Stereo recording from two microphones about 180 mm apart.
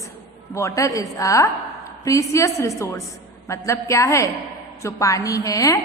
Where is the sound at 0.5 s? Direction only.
15° left (ahead or behind).